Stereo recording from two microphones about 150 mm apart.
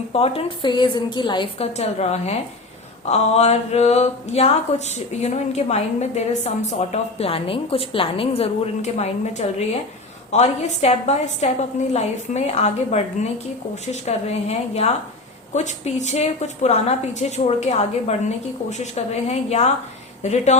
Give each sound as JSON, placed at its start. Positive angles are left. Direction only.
{"t": 0.1, "sound": "a woman's voice", "side_deg": 40}